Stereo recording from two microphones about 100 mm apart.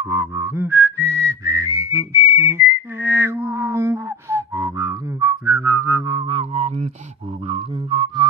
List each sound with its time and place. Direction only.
0.1 s whistling: 20° right (ahead or behind)
6.2 s music: 80° right
7.4 s a sound: 70° right (ahead or behind)